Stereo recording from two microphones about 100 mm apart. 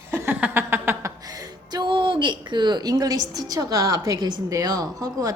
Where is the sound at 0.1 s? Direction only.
15° right (ahead or behind).